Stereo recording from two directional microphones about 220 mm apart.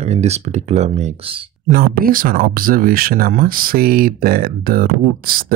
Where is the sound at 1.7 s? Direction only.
40° right (ahead or behind).